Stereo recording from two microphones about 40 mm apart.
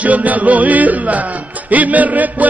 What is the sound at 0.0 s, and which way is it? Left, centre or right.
Speech, right.